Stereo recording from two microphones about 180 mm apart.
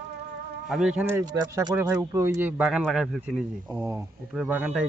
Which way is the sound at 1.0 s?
10° right (ahead or behind).